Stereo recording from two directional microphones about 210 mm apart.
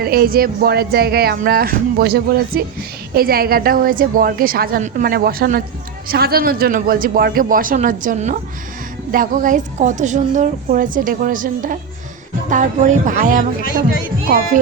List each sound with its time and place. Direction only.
0.0 s a woman's voice: 45° right (ahead or behind)